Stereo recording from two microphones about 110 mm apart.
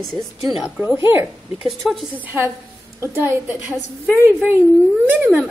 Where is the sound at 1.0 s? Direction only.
20° right (ahead or behind).